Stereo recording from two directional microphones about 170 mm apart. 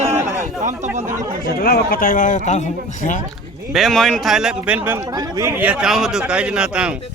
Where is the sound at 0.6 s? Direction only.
45° right (ahead or behind).